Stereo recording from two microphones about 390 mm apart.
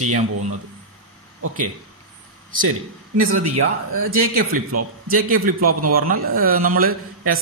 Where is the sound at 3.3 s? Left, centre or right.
Right.